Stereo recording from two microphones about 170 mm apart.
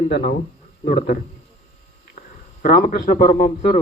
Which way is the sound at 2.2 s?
50° left (ahead or behind).